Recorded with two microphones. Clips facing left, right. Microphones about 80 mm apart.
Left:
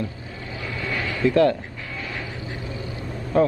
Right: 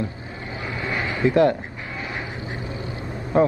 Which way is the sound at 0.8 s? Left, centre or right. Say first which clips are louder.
Right 1 dB; right.